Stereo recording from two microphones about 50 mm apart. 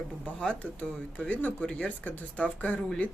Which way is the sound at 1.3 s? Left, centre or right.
Left.